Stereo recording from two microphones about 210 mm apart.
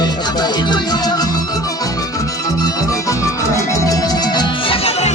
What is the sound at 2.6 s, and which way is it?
Music, 15° left (ahead or behind).